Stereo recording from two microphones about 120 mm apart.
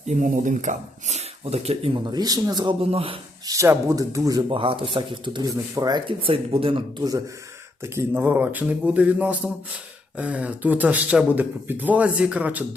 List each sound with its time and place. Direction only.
0.0 s speech: 90° right; by 1.9 s 60° right (ahead or behind)
1.9 s speech: 35° right (ahead or behind)
2.8 s speech: 50° right (ahead or behind)
3.4 s speech: 25° right (ahead or behind)
4.4 s speech: 45° right (ahead or behind)
7.8 s speech: 20° right (ahead or behind)